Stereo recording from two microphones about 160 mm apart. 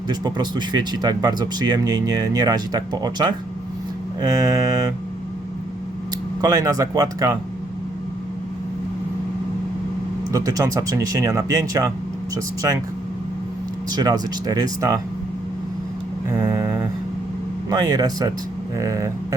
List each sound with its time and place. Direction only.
0.1 s speech: 25° right (ahead or behind)
6.4 s speech: 25° right (ahead or behind)
10.3 s speech: 20° right (ahead or behind)
13.9 s speech: 25° right (ahead or behind)
16.3 s a sound: 20° right (ahead or behind)
17.7 s speech: 25° right (ahead or behind)